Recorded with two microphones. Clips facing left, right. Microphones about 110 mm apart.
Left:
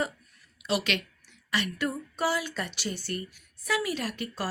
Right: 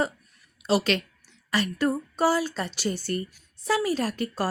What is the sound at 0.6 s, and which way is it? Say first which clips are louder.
A woman's voice: right 5 dB; 35° right (ahead or behind).